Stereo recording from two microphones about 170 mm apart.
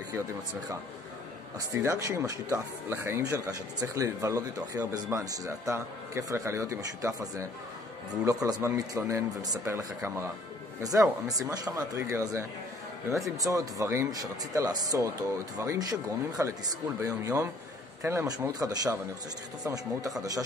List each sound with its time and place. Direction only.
1.8 s speech: 15° right (ahead or behind)